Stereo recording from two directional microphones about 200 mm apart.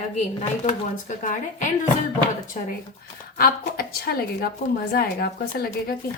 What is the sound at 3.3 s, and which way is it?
A woman's voice, 50° left (ahead or behind).